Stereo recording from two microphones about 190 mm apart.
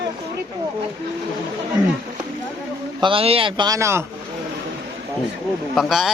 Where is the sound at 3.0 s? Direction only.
25° right (ahead or behind).